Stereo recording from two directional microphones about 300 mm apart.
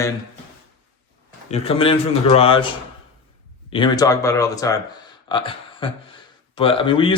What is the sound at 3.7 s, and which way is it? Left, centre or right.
Speech, centre.